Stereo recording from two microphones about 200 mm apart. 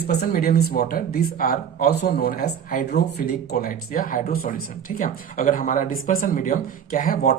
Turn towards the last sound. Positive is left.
turn(degrees=45)  # may be behind; listen again after turning